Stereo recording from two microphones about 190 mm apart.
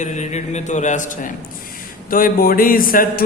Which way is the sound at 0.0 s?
40° left (ahead or behind).